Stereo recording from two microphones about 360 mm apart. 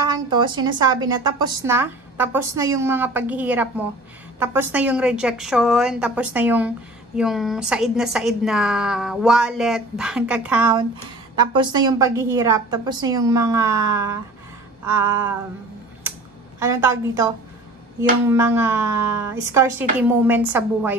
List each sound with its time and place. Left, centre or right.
0.1 s a woman's voice: centre
16.5 s a woman's voice: centre
18.3 s a woman's voice: centre